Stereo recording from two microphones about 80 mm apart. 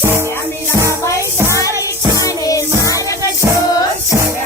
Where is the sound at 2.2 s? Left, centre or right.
Left.